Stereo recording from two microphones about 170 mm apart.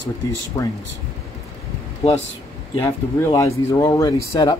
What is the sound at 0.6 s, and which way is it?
Speech, 20° left (ahead or behind).